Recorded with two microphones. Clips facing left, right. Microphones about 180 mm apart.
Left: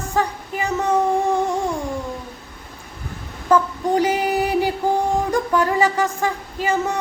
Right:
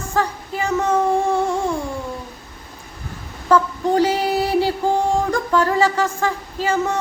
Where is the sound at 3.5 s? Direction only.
15° left (ahead or behind).